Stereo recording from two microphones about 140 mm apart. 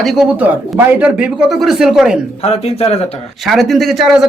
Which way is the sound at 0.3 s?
10° right (ahead or behind).